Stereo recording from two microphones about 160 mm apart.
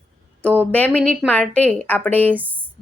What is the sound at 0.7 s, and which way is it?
A woman's voice, 10° left (ahead or behind).